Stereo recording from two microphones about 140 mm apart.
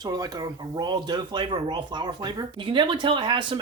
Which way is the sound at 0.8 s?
30° right (ahead or behind).